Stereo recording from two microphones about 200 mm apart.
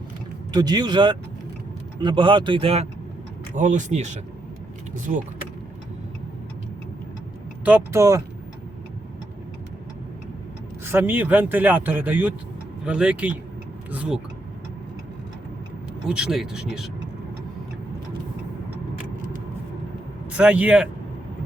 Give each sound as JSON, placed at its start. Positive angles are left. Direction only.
{"t": 0.5, "sound": "speech", "side_deg": -20}
{"t": 3.5, "sound": "speech", "side_deg": -40}
{"t": 7.6, "sound": "speech", "side_deg": -10}
{"t": 10.9, "sound": "speech", "side_deg": -10}
{"t": 16.0, "sound": "speech", "side_deg": -5}
{"t": 20.3, "sound": "speech", "side_deg": -5}